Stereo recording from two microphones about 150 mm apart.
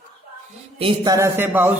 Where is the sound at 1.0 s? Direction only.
20° right (ahead or behind).